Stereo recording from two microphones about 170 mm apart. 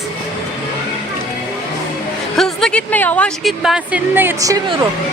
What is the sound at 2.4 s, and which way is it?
A woman's voice, 5° left (ahead or behind).